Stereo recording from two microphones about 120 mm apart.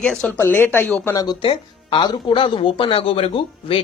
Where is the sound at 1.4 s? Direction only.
45° left (ahead or behind).